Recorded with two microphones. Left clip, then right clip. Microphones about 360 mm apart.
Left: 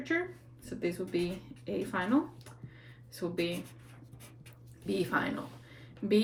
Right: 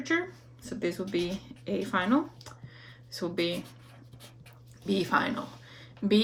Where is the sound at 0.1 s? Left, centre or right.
Right.